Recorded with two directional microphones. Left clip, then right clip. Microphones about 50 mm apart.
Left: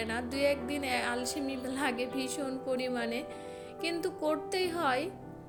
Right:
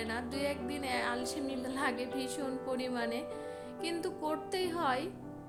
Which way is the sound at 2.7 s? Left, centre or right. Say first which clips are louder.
Left 4 dB; left.